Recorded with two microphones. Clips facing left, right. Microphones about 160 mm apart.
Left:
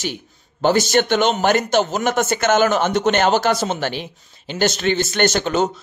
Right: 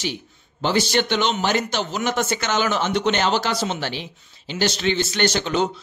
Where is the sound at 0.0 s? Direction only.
50° left (ahead or behind).